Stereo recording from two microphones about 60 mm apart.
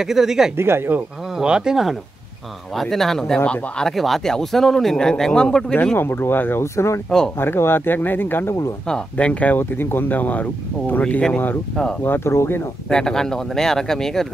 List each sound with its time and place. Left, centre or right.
0.0 s speech: centre
0.6 s speech: right
1.4 s speech: centre
2.7 s speech: centre
3.9 s speech: centre
5.9 s speech: left
6.6 s speech: left
7.3 s speech: left
9.1 s speech: left
12.0 s speech: left
12.9 s speech: centre